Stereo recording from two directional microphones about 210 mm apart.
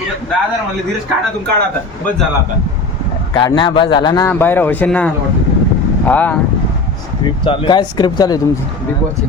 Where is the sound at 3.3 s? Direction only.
20° left (ahead or behind).